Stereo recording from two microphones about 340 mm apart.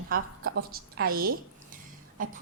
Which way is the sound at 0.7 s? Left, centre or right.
Right.